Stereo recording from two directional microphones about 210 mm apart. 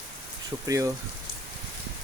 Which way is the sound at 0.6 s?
15° right (ahead or behind).